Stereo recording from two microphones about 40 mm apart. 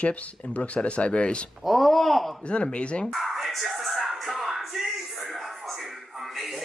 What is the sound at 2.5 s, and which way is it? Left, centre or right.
Speech, left.